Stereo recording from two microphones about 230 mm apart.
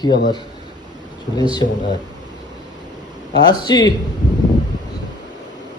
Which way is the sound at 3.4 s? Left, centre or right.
Centre.